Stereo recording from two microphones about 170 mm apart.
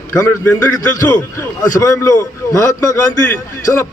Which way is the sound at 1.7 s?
20° left (ahead or behind).